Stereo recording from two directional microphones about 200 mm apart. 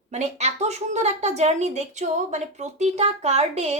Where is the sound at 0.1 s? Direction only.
35° right (ahead or behind).